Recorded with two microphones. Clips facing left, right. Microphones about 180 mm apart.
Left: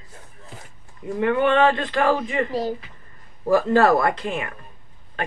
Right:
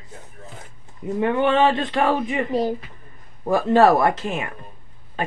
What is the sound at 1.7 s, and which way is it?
Speech, 20° right (ahead or behind).